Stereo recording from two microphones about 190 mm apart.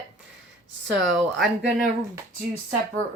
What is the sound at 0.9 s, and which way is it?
Speech, centre (ahead or behind).